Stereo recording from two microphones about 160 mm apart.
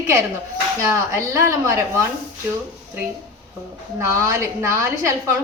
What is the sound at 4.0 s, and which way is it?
A woman's voice, 15° right (ahead or behind).